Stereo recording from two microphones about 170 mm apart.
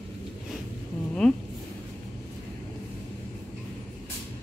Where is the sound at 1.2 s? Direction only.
5° left (ahead or behind).